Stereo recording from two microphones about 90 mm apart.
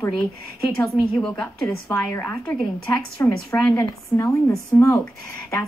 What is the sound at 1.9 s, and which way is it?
Speech, 20° left (ahead or behind).